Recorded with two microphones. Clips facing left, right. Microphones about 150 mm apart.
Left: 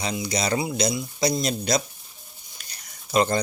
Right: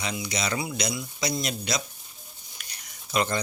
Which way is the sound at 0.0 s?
35° left (ahead or behind).